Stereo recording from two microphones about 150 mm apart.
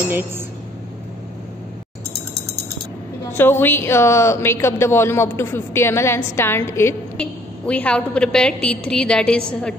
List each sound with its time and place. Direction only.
3.3 s a woman's voice: 15° left (ahead or behind)